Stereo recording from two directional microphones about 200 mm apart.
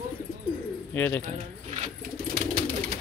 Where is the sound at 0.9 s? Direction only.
10° left (ahead or behind).